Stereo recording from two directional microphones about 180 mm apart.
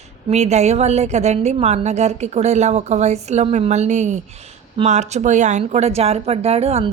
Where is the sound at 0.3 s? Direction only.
40° right (ahead or behind).